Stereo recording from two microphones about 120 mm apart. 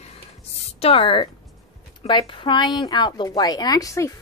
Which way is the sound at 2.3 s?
45° left (ahead or behind).